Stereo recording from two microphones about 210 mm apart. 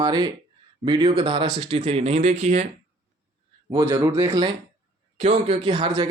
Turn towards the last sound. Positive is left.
turn(degrees=-25)  # may be behind; listen again after turning